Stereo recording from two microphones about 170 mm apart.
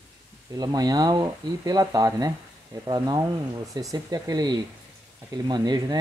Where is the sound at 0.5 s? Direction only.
20° right (ahead or behind).